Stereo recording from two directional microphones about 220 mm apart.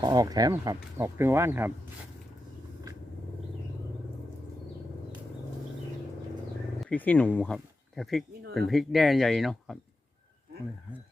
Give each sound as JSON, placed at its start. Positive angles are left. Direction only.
{"t": 0.0, "sound": "speech", "side_deg": -15}
{"t": 6.8, "sound": "speech", "side_deg": 5}